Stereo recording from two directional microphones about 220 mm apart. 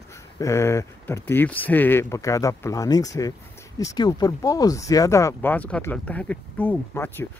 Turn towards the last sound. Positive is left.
turn(degrees=10)  # may be behind; listen again after turning